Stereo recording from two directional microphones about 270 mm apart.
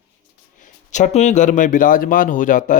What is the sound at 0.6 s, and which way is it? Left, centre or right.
Speech, left.